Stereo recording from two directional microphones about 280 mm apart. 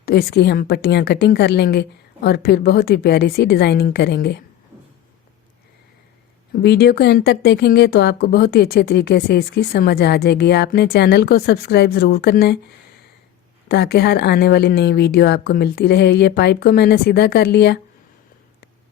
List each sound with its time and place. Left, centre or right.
0.0 s speech: left
6.5 s speech: left
13.7 s speech: left